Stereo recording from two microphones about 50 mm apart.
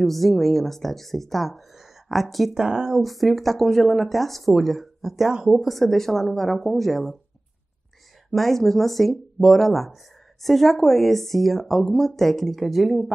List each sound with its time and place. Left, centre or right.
0.0 s speech: centre
2.5 s speech: centre
3.0 s speech: centre
5.7 s speech: centre
8.3 s speech: centre